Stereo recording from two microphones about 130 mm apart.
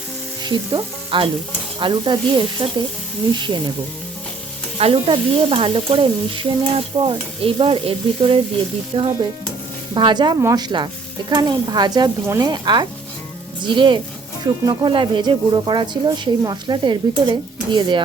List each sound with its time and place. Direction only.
0.4 s frying: 40° right (ahead or behind)
1.8 s speech: 35° right (ahead or behind)
4.8 s stir: 50° right (ahead or behind)
9.9 s speech: 35° right (ahead or behind)
12.2 s speech: 20° right (ahead or behind)
12.5 s speech: 35° right (ahead or behind)